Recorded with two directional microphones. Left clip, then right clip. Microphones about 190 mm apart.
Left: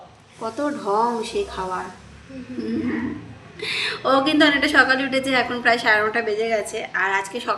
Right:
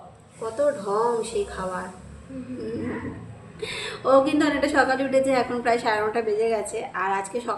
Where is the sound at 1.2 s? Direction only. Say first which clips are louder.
Left 2 dB; 50° left (ahead or behind).